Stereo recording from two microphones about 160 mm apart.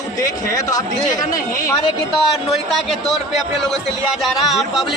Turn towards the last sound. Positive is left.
turn(degrees=0)  # may be behind; listen again after turning